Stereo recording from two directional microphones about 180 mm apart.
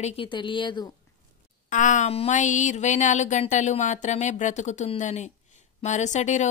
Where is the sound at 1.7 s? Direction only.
45° left (ahead or behind).